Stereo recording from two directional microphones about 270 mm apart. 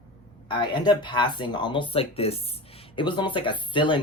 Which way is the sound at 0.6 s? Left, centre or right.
Centre.